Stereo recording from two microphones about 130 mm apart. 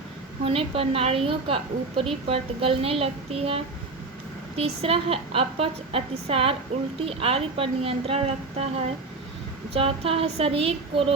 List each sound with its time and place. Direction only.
0.4 s a woman's voice: 45° right (ahead or behind)
9.7 s a woman's voice: 50° right (ahead or behind)